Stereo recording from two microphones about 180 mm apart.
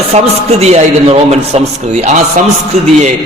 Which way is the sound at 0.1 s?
35° right (ahead or behind).